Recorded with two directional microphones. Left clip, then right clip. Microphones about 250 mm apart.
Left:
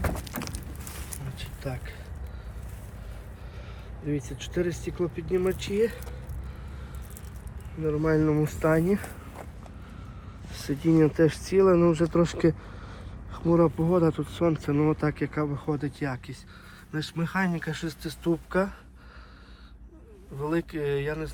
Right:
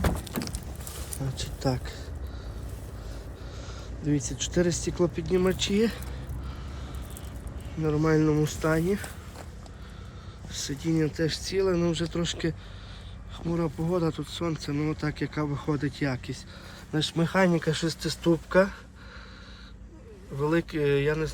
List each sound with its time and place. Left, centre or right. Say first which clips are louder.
1.4 s a sound: right 7 dB; centre
4.0 s speech: right 3 dB; centre
7.8 s speech: even; centre
10.5 s speech: left 5 dB; centre
11.7 s speech: left 6 dB; centre
12.1 s speech: left 6 dB; centre
13.6 s speech: left 4 dB; centre
20.4 s speech: right 3 dB; centre